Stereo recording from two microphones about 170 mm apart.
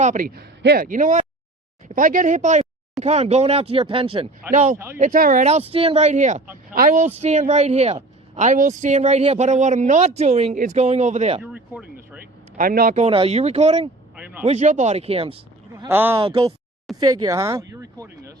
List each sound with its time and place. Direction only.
0.0 s speech: 50° right (ahead or behind); by 4.3 s 30° right (ahead or behind)
4.5 s speech: 45° right (ahead or behind)
5.5 s speech: 40° right (ahead or behind)
11.5 s a sound: 10° right (ahead or behind)
12.5 s speech: 60° right (ahead or behind)
13.0 s speech: 35° right (ahead or behind)
14.2 s a sound: 10° right (ahead or behind)
14.4 s speech: 45° right (ahead or behind)
15.7 s speech: 15° right (ahead or behind)
16.1 s speech: 35° right (ahead or behind)
17.0 s speech: 20° right (ahead or behind)